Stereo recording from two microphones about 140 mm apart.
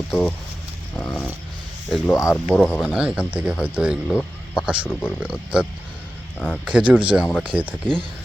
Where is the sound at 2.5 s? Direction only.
10° left (ahead or behind).